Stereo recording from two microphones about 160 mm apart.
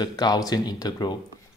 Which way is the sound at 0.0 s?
25° left (ahead or behind).